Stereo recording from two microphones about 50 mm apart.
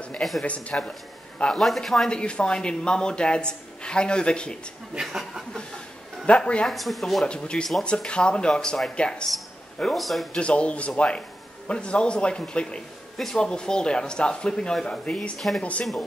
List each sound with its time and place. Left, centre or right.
0.4 s speech: left
1.5 s a man's voice: centre
2.0 s speech: left
5.0 s a man's voice: centre
6.2 s speech: left
6.7 s a man's voice: centre
7.2 s speech: centre
8.5 s a man's voice: centre
8.9 s speech: centre
9.9 s a man's voice: centre
10.3 s a man's voice: left